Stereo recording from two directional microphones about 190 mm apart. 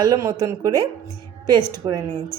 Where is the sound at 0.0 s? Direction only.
20° right (ahead or behind).